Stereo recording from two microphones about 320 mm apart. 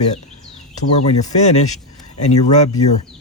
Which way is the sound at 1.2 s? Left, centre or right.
Left.